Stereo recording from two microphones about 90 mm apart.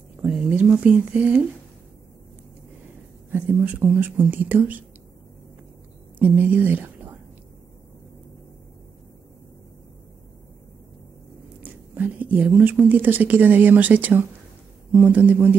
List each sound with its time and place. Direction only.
0.2 s speech: 15° right (ahead or behind)
3.3 s speech: 20° right (ahead or behind)
6.1 s a woman's voice: 20° right (ahead or behind)
11.6 s speech: 20° right (ahead or behind)